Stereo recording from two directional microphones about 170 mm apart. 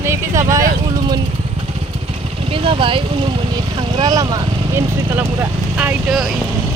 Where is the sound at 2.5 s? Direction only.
30° right (ahead or behind); by 6.3 s centre (ahead or behind).